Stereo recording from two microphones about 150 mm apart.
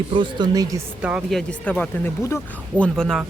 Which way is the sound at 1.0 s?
5° right (ahead or behind).